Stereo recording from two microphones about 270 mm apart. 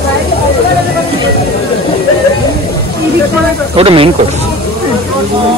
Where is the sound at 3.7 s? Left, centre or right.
Right.